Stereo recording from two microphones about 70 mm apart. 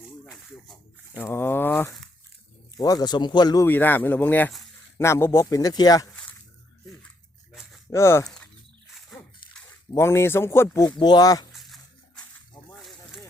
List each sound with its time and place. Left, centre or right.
1.1 s speech: left
2.7 s a man's voice: left
3.7 s speech: left
4.9 s speech: left
5.5 s speech: left
7.5 s a sound: centre
7.9 s speech: left
8.9 s a sound: centre
9.9 s speech: left
10.8 s speech: left
11.5 s a sound: centre